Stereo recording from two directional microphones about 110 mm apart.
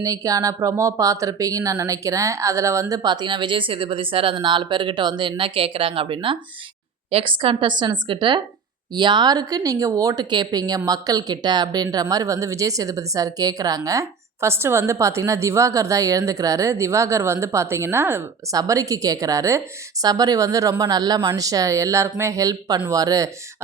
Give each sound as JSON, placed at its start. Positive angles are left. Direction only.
{"t": 0.0, "sound": "speech", "side_deg": -30}
{"t": 3.0, "sound": "speech", "side_deg": -40}
{"t": 18.5, "sound": "speech", "side_deg": -30}